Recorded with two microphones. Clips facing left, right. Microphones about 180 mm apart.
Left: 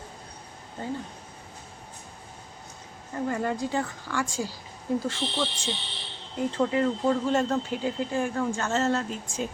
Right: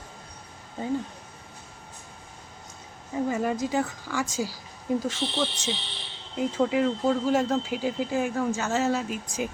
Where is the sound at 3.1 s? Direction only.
10° right (ahead or behind).